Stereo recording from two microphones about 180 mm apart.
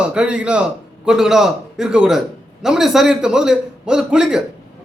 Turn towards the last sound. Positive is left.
turn(degrees=-5)  # may be behind; listen again after turning